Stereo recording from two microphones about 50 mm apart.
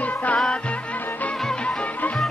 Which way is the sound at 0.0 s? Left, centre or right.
Left.